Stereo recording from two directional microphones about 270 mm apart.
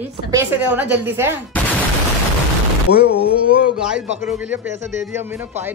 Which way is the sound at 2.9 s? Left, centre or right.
Left.